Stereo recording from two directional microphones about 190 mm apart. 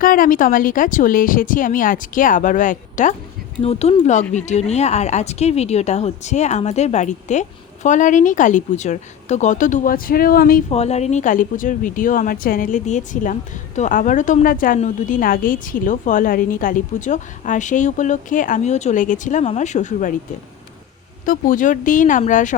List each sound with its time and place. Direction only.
0.0 s a woman's voice: 45° left (ahead or behind)
10.7 s a woman's voice: 35° left (ahead or behind)
21.2 s a woman's voice: 45° left (ahead or behind)